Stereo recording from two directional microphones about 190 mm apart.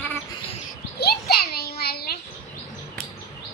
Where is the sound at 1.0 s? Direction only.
55° left (ahead or behind).